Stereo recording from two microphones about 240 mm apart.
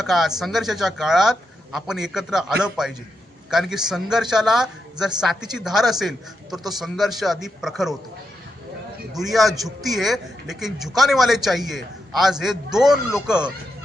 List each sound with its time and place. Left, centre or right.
0.0 s a woman's voice: centre
9.1 s a woman's voice: centre